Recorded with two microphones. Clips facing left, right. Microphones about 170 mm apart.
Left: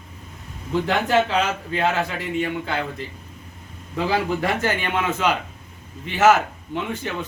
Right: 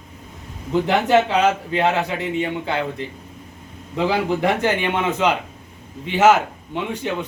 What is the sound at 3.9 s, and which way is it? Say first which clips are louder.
A man's voice: right 2 dB; 20° right (ahead or behind).